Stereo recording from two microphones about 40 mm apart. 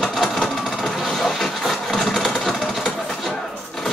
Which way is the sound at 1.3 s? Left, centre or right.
Centre.